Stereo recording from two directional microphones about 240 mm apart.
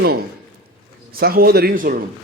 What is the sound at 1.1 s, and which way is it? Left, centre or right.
Speech, right.